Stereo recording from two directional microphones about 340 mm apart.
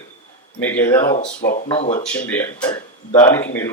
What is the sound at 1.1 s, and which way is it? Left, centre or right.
Speech, left.